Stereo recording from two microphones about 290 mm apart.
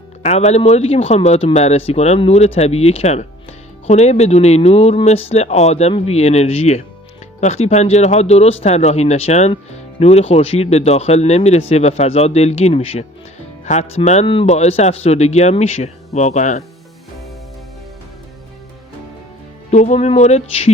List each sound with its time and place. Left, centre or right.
0.2 s speech: left
19.7 s speech: left